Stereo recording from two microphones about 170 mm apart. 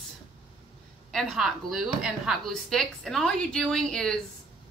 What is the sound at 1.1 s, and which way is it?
A woman's voice, centre (ahead or behind).